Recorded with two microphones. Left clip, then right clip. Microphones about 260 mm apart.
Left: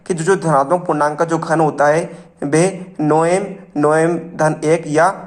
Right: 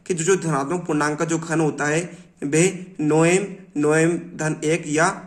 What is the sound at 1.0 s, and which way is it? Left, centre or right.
Speech, right.